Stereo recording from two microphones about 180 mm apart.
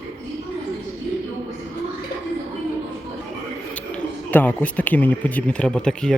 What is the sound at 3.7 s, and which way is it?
Speech, 10° left (ahead or behind).